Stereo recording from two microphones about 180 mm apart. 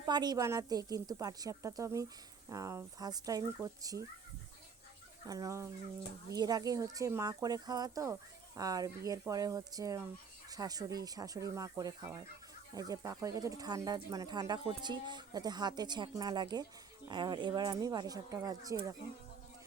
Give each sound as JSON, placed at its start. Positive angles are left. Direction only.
{"t": 0.0, "sound": "speech", "side_deg": -25}
{"t": 5.2, "sound": "speech", "side_deg": -20}